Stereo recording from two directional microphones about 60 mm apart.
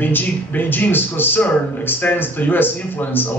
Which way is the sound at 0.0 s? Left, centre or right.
Left.